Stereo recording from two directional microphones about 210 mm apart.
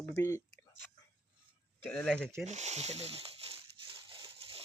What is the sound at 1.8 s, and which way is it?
Speech, 5° left (ahead or behind).